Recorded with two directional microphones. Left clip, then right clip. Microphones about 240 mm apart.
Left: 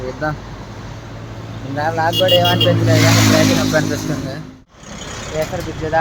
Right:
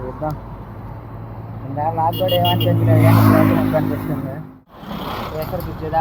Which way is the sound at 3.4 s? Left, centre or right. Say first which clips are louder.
Left 2 dB; left.